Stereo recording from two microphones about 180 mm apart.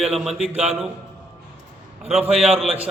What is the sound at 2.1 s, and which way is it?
Speech, 35° right (ahead or behind).